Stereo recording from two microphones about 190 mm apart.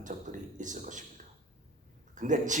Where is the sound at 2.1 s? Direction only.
40° right (ahead or behind).